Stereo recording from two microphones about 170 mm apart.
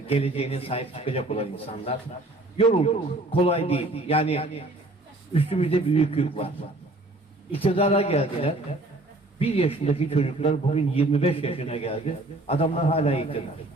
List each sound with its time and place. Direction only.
0.1 s a man's voice: 35° left (ahead or behind)